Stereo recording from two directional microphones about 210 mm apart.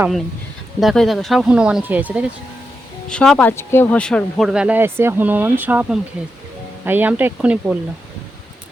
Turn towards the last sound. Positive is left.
turn(degrees=-5)  # may be behind; listen again after turning